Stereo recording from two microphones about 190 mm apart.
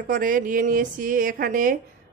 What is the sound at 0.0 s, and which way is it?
Speech, 45° right (ahead or behind).